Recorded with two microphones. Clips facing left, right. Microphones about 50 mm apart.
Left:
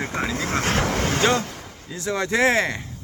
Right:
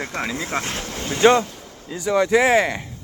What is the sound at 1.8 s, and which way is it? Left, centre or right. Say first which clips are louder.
Speech: right 6 dB; centre.